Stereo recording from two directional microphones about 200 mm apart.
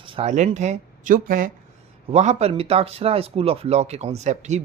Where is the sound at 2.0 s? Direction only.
30° right (ahead or behind).